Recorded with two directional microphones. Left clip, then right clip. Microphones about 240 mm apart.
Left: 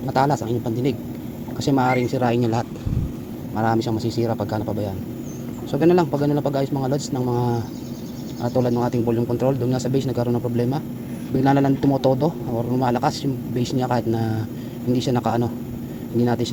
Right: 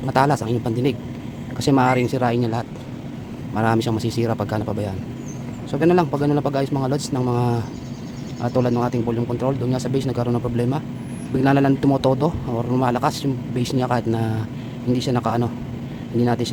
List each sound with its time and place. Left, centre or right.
0.1 s a man's voice: centre
3.5 s a man's voice: right